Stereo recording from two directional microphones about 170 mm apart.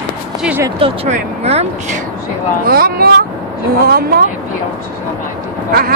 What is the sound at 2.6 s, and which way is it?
Speech, 60° right (ahead or behind).